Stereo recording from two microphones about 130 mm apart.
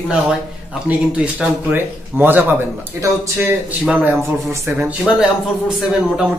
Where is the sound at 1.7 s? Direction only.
15° right (ahead or behind).